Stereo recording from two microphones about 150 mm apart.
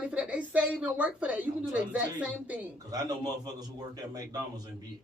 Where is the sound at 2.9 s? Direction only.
25° right (ahead or behind).